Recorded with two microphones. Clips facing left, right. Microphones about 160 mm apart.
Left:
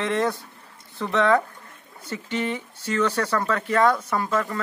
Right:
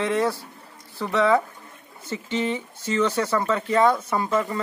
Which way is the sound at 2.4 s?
15° right (ahead or behind).